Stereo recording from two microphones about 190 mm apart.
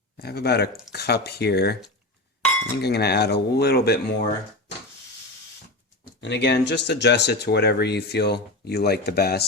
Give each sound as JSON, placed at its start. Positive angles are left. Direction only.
{"t": 0.2, "sound": "speech", "side_deg": 55}
{"t": 6.1, "sound": "speech", "side_deg": 65}